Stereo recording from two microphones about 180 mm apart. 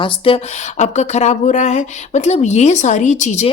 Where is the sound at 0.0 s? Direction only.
30° left (ahead or behind).